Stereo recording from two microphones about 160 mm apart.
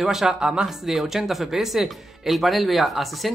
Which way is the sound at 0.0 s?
Centre (ahead or behind).